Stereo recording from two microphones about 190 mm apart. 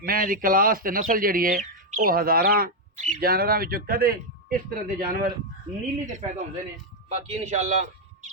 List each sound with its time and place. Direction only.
0.0 s a man's voice: 50° right (ahead or behind)